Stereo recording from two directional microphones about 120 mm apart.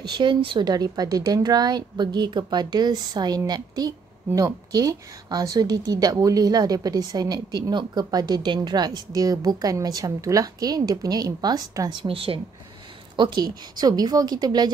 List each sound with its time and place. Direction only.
0.0 s speech: 40° right (ahead or behind)
12.0 s speech: 50° right (ahead or behind)
13.1 s speech: 40° right (ahead or behind)